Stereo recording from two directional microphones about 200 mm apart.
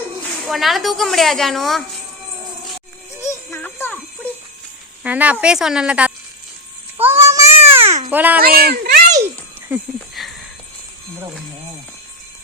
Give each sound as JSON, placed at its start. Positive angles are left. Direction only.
{"t": 0.4, "sound": "a woman's voice", "side_deg": 0}
{"t": 3.2, "sound": "music", "side_deg": 15}
{"t": 5.0, "sound": "a woman's voice", "side_deg": -5}
{"t": 7.0, "sound": "child singing", "side_deg": -10}
{"t": 7.3, "sound": "baby cry", "side_deg": -15}
{"t": 7.8, "sound": "baby cry", "side_deg": -35}
{"t": 8.1, "sound": "a child's voice", "side_deg": -10}
{"t": 8.4, "sound": "a child's voice", "side_deg": -50}
{"t": 9.6, "sound": "a sound", "side_deg": -5}